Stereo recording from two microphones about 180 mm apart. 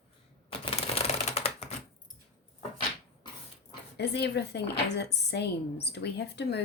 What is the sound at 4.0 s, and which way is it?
A woman's voice, 70° left (ahead or behind).